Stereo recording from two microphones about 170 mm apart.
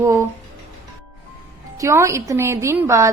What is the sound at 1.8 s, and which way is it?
A woman's voice, 15° right (ahead or behind).